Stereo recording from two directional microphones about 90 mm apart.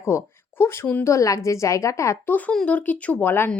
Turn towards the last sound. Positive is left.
turn(degrees=25)  # may be behind; listen again after turning